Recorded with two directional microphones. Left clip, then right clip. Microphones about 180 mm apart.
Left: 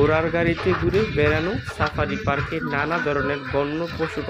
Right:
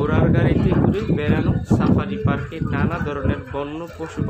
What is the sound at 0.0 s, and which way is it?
A man's voice, 20° left (ahead or behind).